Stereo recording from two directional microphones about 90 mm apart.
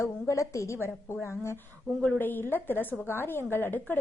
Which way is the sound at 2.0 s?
20° left (ahead or behind).